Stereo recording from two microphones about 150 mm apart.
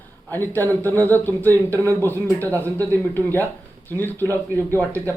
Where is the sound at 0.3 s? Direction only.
15° left (ahead or behind).